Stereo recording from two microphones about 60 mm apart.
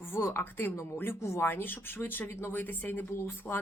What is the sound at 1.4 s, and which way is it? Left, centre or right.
Speech, left.